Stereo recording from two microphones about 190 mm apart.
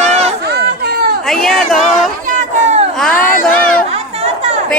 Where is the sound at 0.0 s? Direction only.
35° right (ahead or behind).